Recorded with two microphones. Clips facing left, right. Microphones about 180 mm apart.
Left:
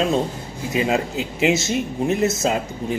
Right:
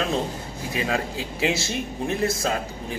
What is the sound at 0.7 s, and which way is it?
A man's voice, 25° left (ahead or behind).